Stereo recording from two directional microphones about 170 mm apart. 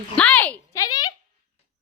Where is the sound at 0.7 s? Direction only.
20° left (ahead or behind).